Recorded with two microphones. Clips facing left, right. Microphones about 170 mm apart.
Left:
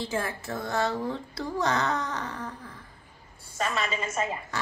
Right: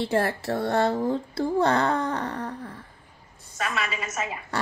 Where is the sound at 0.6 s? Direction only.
60° right (ahead or behind).